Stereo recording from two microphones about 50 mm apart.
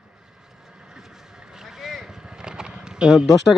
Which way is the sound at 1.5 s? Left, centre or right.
Centre.